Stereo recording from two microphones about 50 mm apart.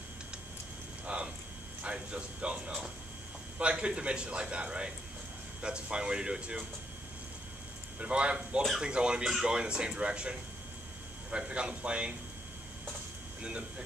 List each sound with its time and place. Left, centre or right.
1.0 s a sound: right
1.8 s a man's voice: right
8.0 s a man's voice: right
13.4 s a man's voice: centre